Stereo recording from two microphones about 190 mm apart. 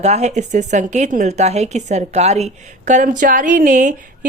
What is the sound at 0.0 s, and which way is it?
Speech, 35° right (ahead or behind).